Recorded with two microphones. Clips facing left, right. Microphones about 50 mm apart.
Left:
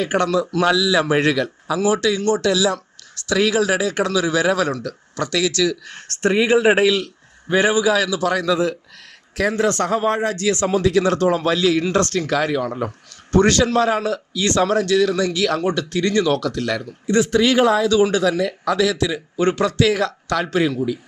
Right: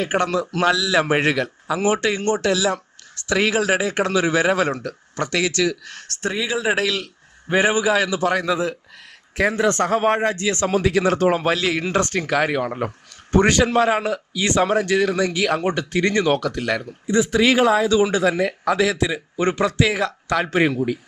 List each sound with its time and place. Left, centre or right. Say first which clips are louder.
0.0 s speech: left 2 dB; centre
1.2 s a man's voice: left 2 dB; centre
1.8 s speech: left 2 dB; right
2.4 s speech: left 2 dB; centre
6.0 s speech: left 9 dB; left
6.8 s a sound: left 6 dB; centre
7.5 s speech: left 1 dB; right
10.8 s speech: even; centre
11.5 s speech: left 3 dB; centre
17.8 s speech: left 1 dB; right